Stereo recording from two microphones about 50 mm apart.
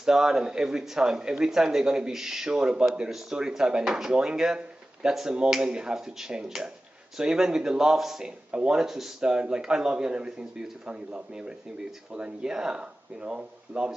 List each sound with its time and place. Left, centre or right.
0.0 s speech: centre